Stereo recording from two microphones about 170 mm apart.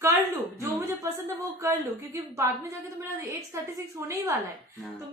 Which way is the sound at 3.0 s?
15° right (ahead or behind).